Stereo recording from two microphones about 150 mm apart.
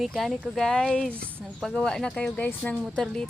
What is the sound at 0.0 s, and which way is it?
Speech, centre (ahead or behind).